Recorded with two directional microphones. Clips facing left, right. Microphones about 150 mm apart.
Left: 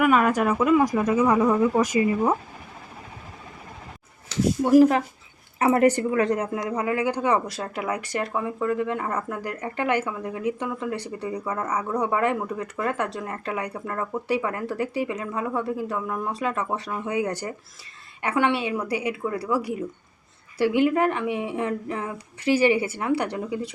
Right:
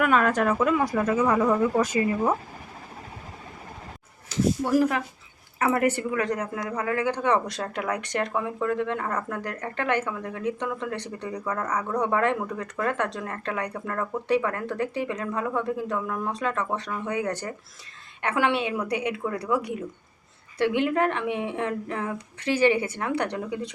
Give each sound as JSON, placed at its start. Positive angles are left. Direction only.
{"t": 0.0, "sound": "a woman's voice", "side_deg": 10}
{"t": 4.6, "sound": "a woman's voice", "side_deg": 25}